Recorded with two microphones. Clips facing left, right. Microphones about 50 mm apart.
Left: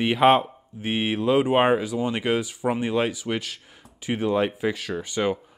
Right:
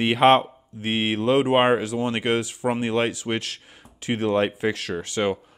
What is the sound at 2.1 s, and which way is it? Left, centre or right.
Speech, right.